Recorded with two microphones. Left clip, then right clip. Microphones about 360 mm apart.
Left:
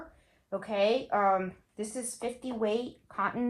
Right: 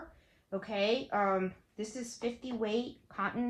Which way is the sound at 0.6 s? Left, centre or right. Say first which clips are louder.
Left 4 dB; centre.